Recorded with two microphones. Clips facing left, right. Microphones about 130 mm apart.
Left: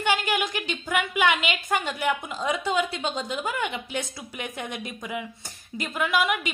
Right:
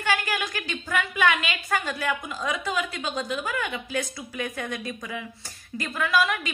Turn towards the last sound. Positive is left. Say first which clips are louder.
# even
turn(degrees=20)  # may be behind; listen again after turning